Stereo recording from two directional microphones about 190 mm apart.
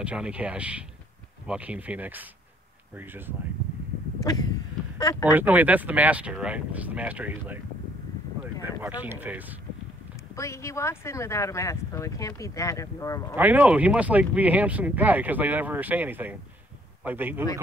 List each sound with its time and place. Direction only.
0.0 s speech: 5° right (ahead or behind)
4.3 s a sound: 20° left (ahead or behind)
5.2 s speech: 10° right (ahead or behind)
8.8 s speech: 10° right (ahead or behind)
10.3 s speech: 15° left (ahead or behind)
13.4 s speech: 10° right (ahead or behind)